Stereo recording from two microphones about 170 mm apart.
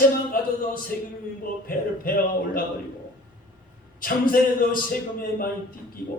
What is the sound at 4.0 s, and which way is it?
A man's voice, 55° left (ahead or behind).